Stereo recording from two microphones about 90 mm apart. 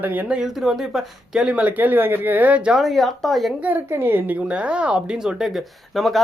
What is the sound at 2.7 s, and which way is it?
Speech, centre (ahead or behind).